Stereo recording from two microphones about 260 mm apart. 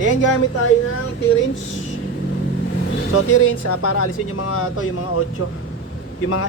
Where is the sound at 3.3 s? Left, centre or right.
Left.